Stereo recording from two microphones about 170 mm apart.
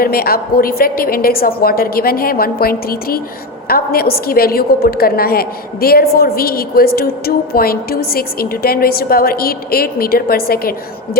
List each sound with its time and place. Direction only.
0.0 s a woman's voice: 60° left (ahead or behind)